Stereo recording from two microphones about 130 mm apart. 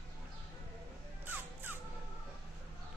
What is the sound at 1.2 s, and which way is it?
Music, 15° right (ahead or behind).